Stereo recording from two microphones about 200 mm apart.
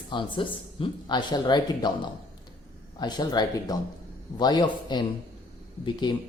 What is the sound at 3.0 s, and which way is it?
Speech, 20° left (ahead or behind).